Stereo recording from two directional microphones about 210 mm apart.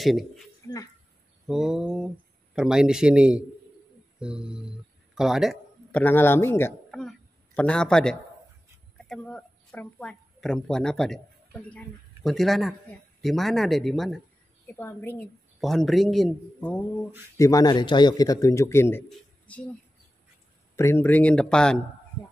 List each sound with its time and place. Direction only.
0.0 s speech: centre (ahead or behind)
1.5 s a woman's voice: centre (ahead or behind)
6.9 s a sound: centre (ahead or behind)
8.9 s a man's voice: 5° left (ahead or behind)
17.4 s a man's voice: 15° left (ahead or behind)
20.7 s a man's voice: 10° left (ahead or behind)